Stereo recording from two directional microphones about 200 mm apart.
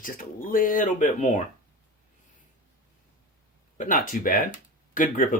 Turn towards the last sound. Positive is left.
turn(degrees=40)  # may be behind; listen again after turning